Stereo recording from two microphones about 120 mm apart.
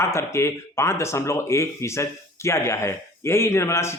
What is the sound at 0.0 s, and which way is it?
Speech, 20° left (ahead or behind).